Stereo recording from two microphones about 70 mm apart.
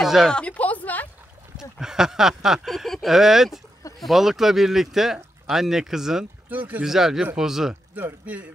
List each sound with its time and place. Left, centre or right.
0.0 s a sound: centre
0.3 s a sound: centre
1.8 s speech: centre
6.5 s speech: right
6.8 s speech: centre
7.9 s a man's voice: right